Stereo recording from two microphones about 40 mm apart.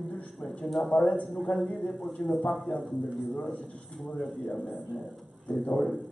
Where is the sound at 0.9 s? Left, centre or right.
Left.